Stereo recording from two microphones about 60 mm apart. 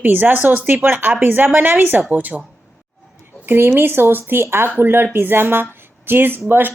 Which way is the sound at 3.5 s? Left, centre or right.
Right.